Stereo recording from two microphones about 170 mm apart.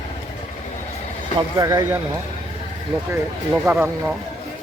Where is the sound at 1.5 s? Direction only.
20° right (ahead or behind).